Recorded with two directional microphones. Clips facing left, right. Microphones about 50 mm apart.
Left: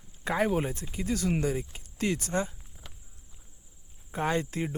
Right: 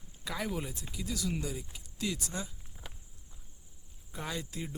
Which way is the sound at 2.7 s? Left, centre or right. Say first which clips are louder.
Right 4 dB; centre.